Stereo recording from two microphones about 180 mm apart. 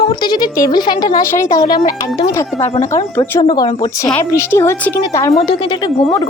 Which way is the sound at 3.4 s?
25° left (ahead or behind).